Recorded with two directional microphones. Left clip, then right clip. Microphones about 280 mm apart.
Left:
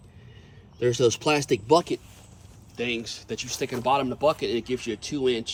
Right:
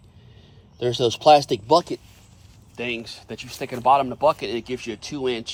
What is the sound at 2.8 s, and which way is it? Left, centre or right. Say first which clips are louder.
Speech: even; centre.